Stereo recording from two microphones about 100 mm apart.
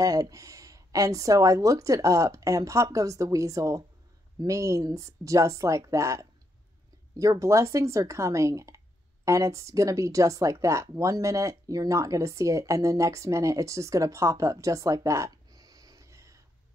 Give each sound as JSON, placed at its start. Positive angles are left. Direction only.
{"t": 0.0, "sound": "speech", "side_deg": -35}